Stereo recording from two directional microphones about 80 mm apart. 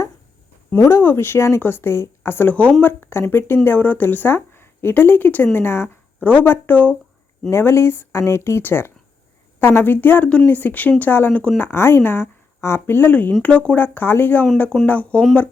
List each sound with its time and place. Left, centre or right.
0.8 s speech: left
7.5 s speech: left